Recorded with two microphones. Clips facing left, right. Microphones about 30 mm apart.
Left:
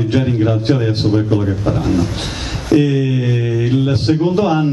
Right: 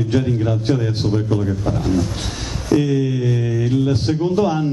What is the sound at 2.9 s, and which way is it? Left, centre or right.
A man's voice, left.